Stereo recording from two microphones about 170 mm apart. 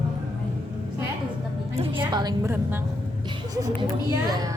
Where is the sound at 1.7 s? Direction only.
30° right (ahead or behind); by 2.8 s 15° right (ahead or behind).